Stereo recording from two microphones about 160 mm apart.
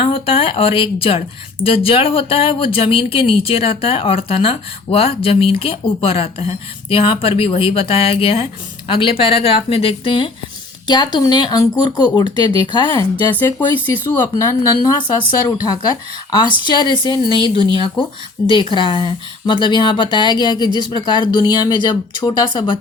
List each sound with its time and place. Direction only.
0.0 s speech: 35° left (ahead or behind)
13.7 s speech: 15° left (ahead or behind)